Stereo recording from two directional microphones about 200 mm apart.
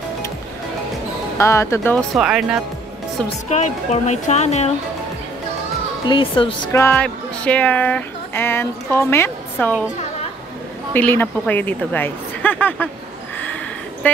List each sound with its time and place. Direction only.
1.4 s speech: 15° left (ahead or behind)
2.1 s speech: 5° right (ahead or behind)
3.4 s speech: 35° left (ahead or behind)
6.0 s speech: 25° left (ahead or behind)
6.7 s speech: 10° left (ahead or behind)
10.9 s speech: 10° left (ahead or behind)
14.0 s speech: 10° left (ahead or behind)